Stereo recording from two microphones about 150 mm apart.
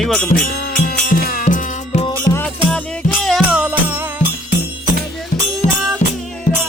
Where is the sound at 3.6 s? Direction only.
10° right (ahead or behind).